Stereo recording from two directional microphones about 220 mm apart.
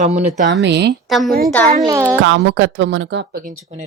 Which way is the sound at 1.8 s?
15° right (ahead or behind).